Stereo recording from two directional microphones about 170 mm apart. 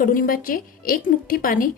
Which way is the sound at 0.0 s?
55° left (ahead or behind).